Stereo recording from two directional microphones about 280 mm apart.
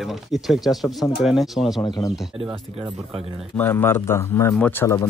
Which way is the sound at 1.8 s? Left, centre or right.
Centre.